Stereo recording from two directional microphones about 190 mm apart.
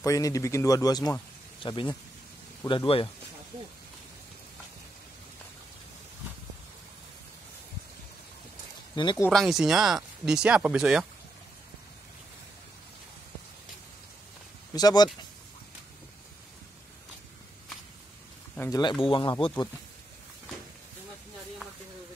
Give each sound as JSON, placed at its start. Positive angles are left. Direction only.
{"t": 0.0, "sound": "speech", "side_deg": 15}
{"t": 8.9, "sound": "speech", "side_deg": 25}
{"t": 9.3, "sound": "speech", "side_deg": 0}
{"t": 14.7, "sound": "speech", "side_deg": 20}
{"t": 18.6, "sound": "speech", "side_deg": 20}